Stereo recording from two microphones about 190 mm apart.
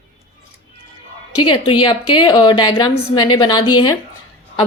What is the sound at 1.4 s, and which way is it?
A woman's voice, 25° left (ahead or behind).